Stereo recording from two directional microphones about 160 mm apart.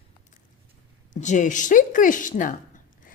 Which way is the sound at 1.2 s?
50° left (ahead or behind).